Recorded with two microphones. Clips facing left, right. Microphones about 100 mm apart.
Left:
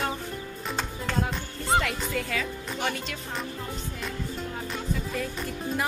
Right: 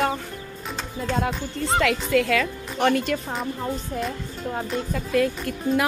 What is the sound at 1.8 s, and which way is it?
Speech, 90° right.